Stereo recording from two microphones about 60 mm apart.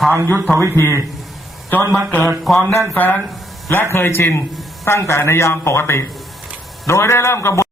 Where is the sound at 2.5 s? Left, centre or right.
Centre.